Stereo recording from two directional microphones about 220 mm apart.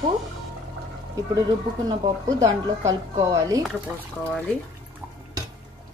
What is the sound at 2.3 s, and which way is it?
A woman's voice, 15° right (ahead or behind).